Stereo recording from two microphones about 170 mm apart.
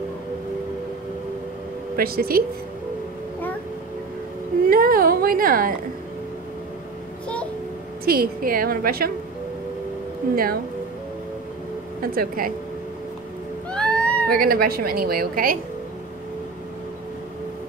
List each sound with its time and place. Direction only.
2.0 s speech: 60° right (ahead or behind)
4.6 s a sound: 60° right (ahead or behind)
8.0 s speech: 60° right (ahead or behind)
10.3 s speech: 60° right (ahead or behind)
12.0 s speech: 60° right (ahead or behind)
13.7 s baby cry: 5° left (ahead or behind)
14.3 s speech: 60° right (ahead or behind)